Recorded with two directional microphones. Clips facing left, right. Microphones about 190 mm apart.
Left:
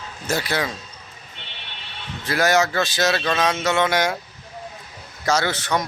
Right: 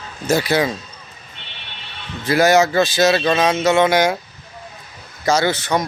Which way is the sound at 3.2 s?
15° right (ahead or behind).